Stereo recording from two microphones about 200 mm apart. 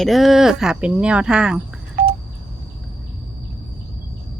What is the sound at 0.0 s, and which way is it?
A woman's voice, centre (ahead or behind).